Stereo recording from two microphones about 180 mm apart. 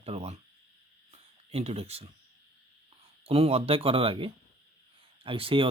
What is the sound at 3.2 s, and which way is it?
Speech, 30° right (ahead or behind).